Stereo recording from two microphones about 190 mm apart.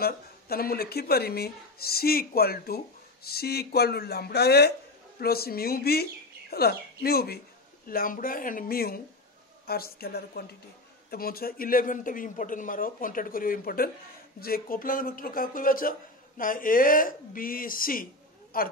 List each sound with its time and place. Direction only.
0.0 s a man's voice: 50° left (ahead or behind)